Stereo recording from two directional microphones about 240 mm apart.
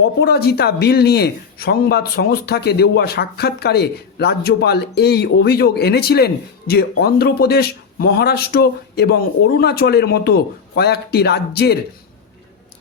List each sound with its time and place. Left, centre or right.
0.0 s speech: left